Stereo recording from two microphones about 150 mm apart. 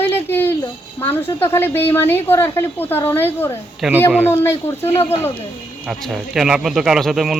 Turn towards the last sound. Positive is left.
turn(degrees=-5)  # may be behind; listen again after turning